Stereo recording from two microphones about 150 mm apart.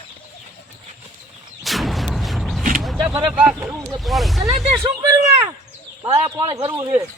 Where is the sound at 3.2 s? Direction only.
10° right (ahead or behind).